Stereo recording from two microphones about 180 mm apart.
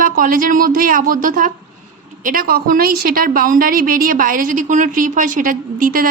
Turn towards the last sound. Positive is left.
turn(degrees=-50)  # may be behind; listen again after turning